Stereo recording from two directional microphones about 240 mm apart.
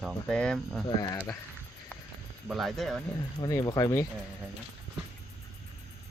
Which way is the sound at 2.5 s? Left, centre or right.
Centre.